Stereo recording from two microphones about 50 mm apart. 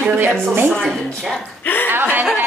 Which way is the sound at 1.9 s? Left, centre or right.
Right.